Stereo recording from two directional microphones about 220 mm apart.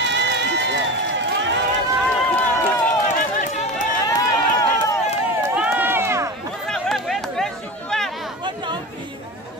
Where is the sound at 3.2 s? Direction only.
35° left (ahead or behind).